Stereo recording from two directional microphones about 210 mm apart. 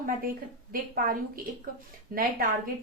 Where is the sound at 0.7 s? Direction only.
40° right (ahead or behind).